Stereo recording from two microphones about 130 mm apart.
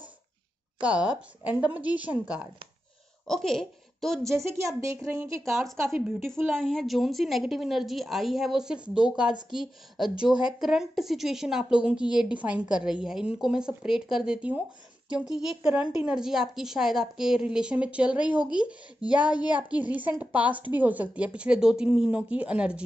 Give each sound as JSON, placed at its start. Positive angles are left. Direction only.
{"t": 0.7, "sound": "a woman's voice", "side_deg": -10}
{"t": 3.3, "sound": "a woman's voice", "side_deg": 5}
{"t": 4.5, "sound": "a woman's voice", "side_deg": -20}
{"t": 6.5, "sound": "a woman's voice", "side_deg": 5}